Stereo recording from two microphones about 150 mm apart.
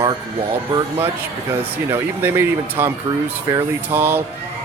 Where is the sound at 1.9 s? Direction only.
15° right (ahead or behind).